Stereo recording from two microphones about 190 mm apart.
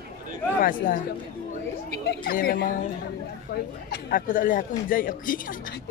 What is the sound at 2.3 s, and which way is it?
Speech, 55° left (ahead or behind).